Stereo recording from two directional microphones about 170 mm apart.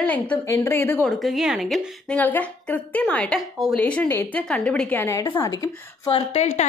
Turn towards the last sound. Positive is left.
turn(degrees=40)  # may be behind; listen again after turning